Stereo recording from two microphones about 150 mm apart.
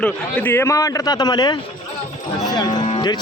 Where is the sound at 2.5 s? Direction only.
25° left (ahead or behind).